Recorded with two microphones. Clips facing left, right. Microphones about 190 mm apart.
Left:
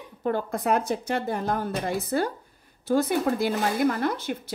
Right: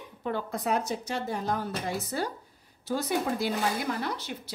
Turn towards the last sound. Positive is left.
turn(degrees=50)  # may be behind; listen again after turning